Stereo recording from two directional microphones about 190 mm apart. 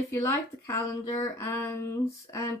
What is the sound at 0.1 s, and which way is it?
Speech, 15° left (ahead or behind).